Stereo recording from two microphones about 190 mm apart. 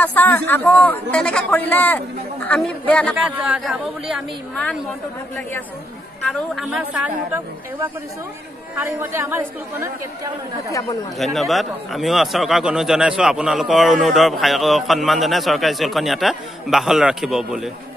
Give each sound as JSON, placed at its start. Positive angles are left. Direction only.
{"t": 0.0, "sound": "a man's voice", "side_deg": 10}
{"t": 3.2, "sound": "a man's voice", "side_deg": -5}
{"t": 6.5, "sound": "a man's voice", "side_deg": -5}
{"t": 8.7, "sound": "speech", "side_deg": -10}
{"t": 10.7, "sound": "a man's voice", "side_deg": 20}
{"t": 11.1, "sound": "a man's voice", "side_deg": 0}